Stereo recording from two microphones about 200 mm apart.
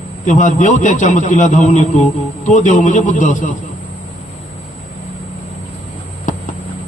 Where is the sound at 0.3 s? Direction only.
40° left (ahead or behind).